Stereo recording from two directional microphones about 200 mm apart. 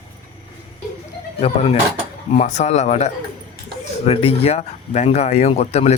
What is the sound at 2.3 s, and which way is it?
Speech, 35° left (ahead or behind).